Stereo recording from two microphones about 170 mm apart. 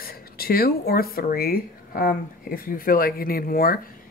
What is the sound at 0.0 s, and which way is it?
Speech, 60° left (ahead or behind).